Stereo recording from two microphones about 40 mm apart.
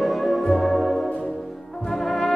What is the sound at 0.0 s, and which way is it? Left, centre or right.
Music, centre.